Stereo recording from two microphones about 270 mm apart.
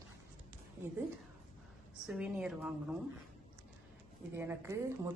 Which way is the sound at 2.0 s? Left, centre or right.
Centre.